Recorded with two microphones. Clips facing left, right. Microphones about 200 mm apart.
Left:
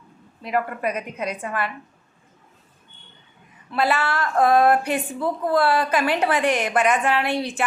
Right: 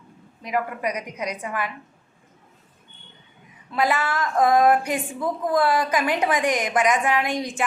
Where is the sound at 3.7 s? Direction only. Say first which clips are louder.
Left 1 dB; 15° right (ahead or behind).